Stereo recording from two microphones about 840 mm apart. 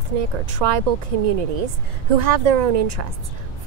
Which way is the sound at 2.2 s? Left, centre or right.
Right.